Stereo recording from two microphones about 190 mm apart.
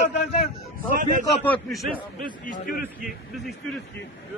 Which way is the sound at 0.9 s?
40° right (ahead or behind).